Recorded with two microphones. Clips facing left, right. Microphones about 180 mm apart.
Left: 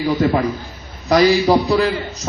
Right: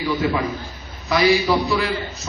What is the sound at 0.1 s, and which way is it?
A man's voice, 45° left (ahead or behind).